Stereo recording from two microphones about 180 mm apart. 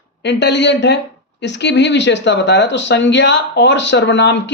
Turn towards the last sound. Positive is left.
turn(degrees=75)  # may be behind; listen again after turning